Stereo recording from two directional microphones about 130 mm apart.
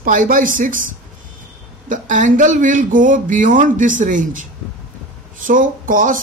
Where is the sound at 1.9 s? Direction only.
80° right.